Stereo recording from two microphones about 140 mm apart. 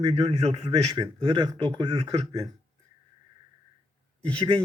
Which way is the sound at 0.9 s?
35° right (ahead or behind).